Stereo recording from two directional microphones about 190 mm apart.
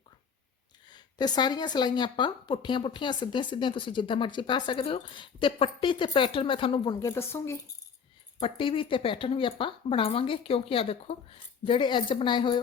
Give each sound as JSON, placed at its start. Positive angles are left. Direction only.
{"t": 0.9, "sound": "a woman's voice", "side_deg": 20}
{"t": 7.0, "sound": "speech", "side_deg": 15}
{"t": 8.4, "sound": "a woman's voice", "side_deg": 30}